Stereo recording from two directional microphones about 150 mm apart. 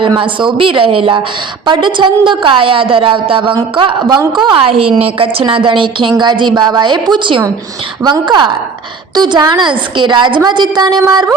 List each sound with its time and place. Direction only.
0.2 s a woman's voice: 35° right (ahead or behind)